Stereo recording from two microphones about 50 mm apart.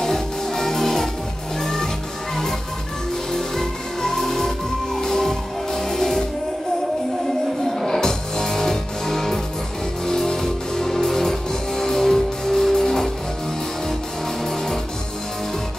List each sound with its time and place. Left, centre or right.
0.0 s music: centre
3.3 s music: centre
7.8 s music: centre